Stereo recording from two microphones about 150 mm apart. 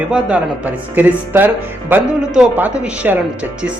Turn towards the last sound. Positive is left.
turn(degrees=-10)  # may be behind; listen again after turning